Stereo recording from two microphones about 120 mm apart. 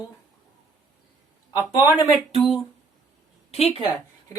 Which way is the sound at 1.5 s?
30° left (ahead or behind).